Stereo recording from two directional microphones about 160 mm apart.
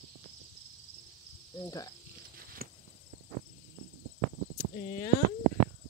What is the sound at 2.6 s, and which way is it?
Walk, 65° right (ahead or behind).